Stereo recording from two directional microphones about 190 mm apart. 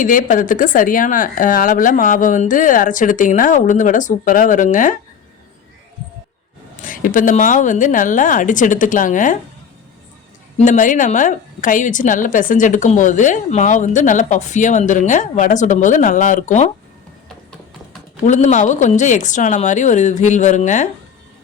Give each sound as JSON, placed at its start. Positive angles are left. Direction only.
{"t": 0.0, "sound": "speech", "side_deg": 45}
{"t": 6.8, "sound": "speech", "side_deg": 45}
{"t": 10.6, "sound": "a woman's voice", "side_deg": 45}
{"t": 18.3, "sound": "a woman's voice", "side_deg": 40}